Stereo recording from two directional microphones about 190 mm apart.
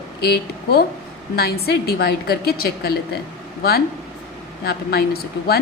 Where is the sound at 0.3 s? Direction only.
55° left (ahead or behind).